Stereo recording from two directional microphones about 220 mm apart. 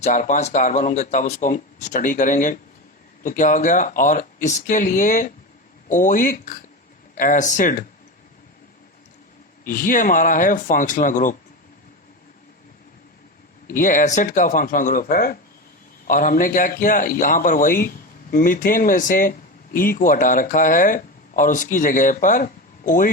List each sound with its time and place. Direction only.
0.0 s a man's voice: 35° left (ahead or behind)
9.6 s a man's voice: 40° left (ahead or behind)
13.7 s a man's voice: 40° left (ahead or behind)